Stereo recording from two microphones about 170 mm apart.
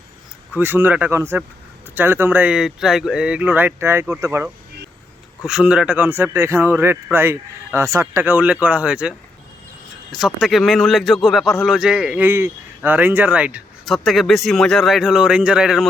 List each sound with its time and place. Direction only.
0.5 s a man's voice: 10° right (ahead or behind)
5.5 s a man's voice: 5° right (ahead or behind)
10.2 s a man's voice: centre (ahead or behind)